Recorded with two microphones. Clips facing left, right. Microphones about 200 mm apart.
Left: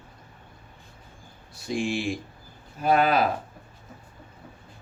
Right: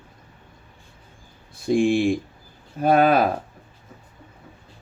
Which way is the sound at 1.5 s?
55° right (ahead or behind).